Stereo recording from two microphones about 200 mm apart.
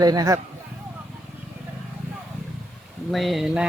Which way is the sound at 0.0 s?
20° right (ahead or behind).